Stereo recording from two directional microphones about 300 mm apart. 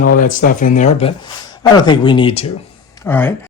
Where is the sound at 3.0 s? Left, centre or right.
Centre.